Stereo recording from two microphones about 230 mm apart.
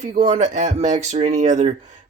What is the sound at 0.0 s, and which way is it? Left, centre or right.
Speech, right.